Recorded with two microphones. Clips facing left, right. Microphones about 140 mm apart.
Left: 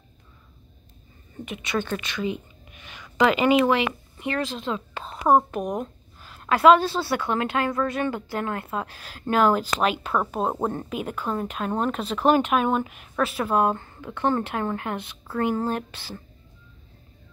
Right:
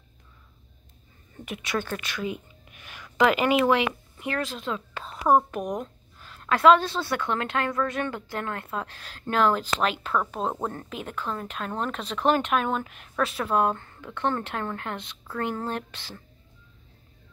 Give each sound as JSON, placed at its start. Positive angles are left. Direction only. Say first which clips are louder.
{"t": 1.3, "sound": "a woman's voice", "louder": "left 2 dB", "side_deg": -5}
{"t": 4.9, "sound": "a sound", "louder": "left 2 dB", "side_deg": 25}
{"t": 5.3, "sound": "a woman's voice", "louder": "left 2 dB", "side_deg": 0}